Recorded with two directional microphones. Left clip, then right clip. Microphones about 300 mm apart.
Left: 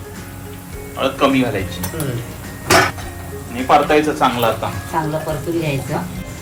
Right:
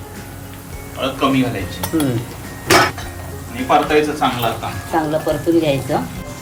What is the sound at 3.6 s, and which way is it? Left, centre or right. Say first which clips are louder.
A man's voice: left 1 dB; centre.